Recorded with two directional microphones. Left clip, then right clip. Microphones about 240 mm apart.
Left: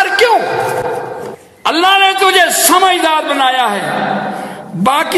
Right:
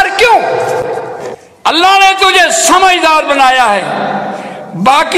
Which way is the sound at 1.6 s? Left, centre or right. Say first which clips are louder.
Right 3 dB; left.